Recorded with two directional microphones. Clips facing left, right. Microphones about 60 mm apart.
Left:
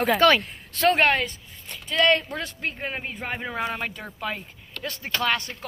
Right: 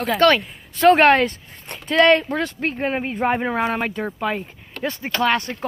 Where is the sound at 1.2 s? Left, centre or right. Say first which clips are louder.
Right 9 dB; right.